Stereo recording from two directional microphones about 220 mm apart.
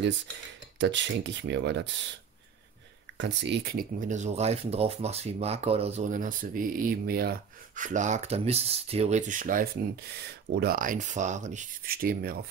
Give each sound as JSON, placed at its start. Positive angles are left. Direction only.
{"t": 0.7, "sound": "speech", "side_deg": -55}
{"t": 3.2, "sound": "speech", "side_deg": -55}